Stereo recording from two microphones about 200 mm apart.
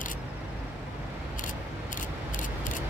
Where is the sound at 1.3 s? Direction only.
40° left (ahead or behind).